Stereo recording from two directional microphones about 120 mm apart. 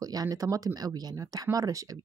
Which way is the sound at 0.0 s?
30° right (ahead or behind).